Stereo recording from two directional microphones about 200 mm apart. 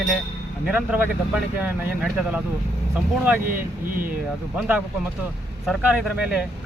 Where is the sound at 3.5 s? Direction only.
45° right (ahead or behind).